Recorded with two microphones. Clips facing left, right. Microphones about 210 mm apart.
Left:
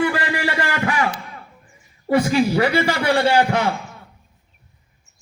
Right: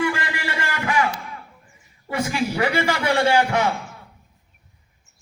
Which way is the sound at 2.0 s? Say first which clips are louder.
Left 7 dB; 35° left (ahead or behind).